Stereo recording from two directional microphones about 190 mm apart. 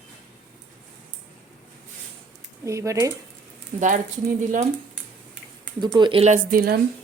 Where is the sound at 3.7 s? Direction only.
40° right (ahead or behind).